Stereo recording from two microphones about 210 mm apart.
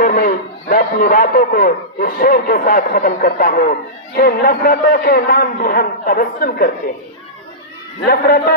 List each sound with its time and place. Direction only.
0.0 s a man's voice: 40° left (ahead or behind)
8.0 s a man's voice: 45° left (ahead or behind)